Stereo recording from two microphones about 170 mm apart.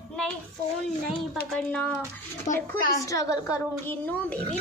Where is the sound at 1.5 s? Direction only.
10° left (ahead or behind).